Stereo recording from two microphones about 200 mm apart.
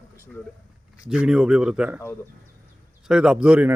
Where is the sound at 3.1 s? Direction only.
5° right (ahead or behind).